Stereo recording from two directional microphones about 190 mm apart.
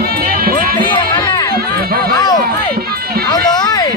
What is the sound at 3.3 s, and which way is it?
Music, 20° left (ahead or behind).